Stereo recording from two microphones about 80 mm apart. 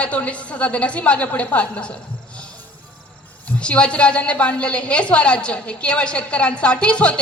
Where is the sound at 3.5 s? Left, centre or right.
Centre.